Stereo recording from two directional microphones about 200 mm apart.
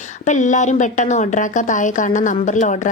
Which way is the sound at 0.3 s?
40° left (ahead or behind).